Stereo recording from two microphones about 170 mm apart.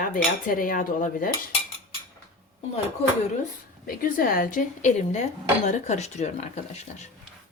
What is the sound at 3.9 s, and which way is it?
Cutlery, 55° left (ahead or behind).